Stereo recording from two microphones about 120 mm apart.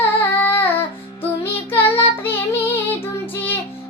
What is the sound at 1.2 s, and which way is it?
Music, 15° left (ahead or behind).